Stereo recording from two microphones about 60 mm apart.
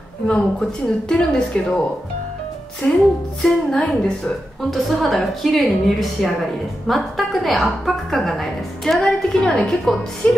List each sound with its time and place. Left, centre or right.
0.3 s a woman's voice: centre
2.8 s music: left
3.4 s a woman's voice: centre
10.2 s music: centre